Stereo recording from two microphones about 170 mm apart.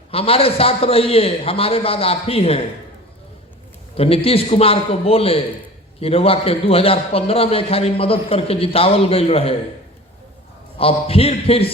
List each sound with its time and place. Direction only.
0.1 s a man's voice: 35° left (ahead or behind)
3.9 s a man's voice: 35° left (ahead or behind)
10.8 s a man's voice: 35° left (ahead or behind)